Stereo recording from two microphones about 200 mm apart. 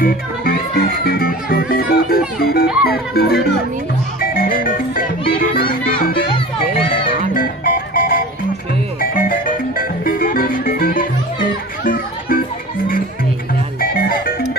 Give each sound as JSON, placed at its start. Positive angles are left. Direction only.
{"t": 0.0, "sound": "speech", "side_deg": 45}
{"t": 4.2, "sound": "music", "side_deg": 45}
{"t": 7.2, "sound": "music", "side_deg": 45}